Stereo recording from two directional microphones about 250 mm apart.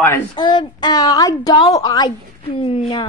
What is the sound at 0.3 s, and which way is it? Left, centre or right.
A woman's voice, centre.